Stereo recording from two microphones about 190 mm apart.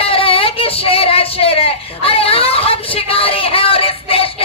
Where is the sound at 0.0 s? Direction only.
30° left (ahead or behind).